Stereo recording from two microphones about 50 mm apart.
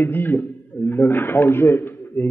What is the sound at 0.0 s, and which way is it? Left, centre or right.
A man's voice, left.